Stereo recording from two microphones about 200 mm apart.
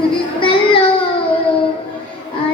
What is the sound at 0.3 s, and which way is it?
Child singing, 25° left (ahead or behind).